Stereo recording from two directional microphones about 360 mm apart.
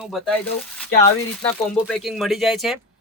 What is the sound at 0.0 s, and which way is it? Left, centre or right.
Speech, centre.